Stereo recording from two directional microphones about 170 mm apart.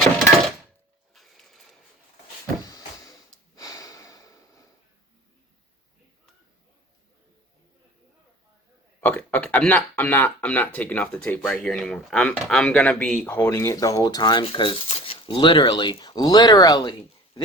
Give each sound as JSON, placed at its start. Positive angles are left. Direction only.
{"t": 1.1, "sound": "sewing machine", "side_deg": 0}
{"t": 2.6, "sound": "vehicle", "side_deg": 20}
{"t": 3.5, "sound": "snort", "side_deg": 20}
{"t": 9.0, "sound": "speech", "side_deg": 10}